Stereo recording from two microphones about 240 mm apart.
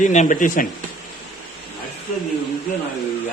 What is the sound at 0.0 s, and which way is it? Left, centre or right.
Speech, left.